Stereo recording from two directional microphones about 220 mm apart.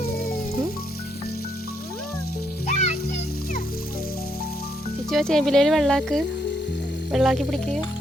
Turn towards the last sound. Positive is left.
turn(degrees=0)  # may be behind; listen again after turning